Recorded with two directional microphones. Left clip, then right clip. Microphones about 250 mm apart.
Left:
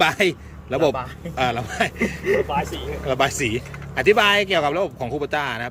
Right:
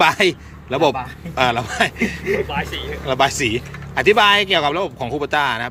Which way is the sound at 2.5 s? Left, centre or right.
Left.